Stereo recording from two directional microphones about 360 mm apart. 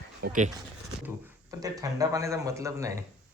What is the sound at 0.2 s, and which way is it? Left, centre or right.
Speech, right.